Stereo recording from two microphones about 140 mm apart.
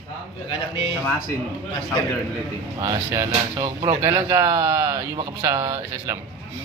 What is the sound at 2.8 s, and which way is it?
Speech, 20° right (ahead or behind).